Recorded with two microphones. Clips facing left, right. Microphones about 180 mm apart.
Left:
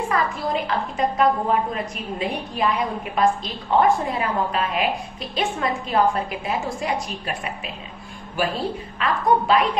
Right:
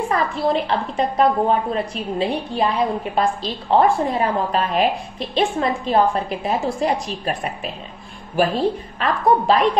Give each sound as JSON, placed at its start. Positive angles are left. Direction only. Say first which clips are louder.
{"t": 0.1, "sound": "a woman's voice", "louder": "right 5 dB", "side_deg": -30}
{"t": 9.0, "sound": "a woman's voice", "louder": "right 3 dB", "side_deg": -35}